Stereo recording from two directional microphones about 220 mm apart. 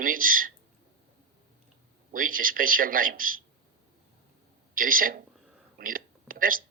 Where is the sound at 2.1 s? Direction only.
40° right (ahead or behind).